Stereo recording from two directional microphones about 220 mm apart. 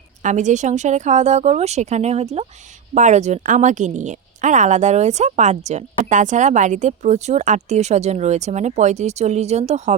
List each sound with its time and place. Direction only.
0.2 s a woman's voice: 35° right (ahead or behind)